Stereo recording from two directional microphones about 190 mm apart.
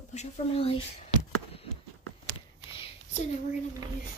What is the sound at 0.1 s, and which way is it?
Speech, 35° left (ahead or behind).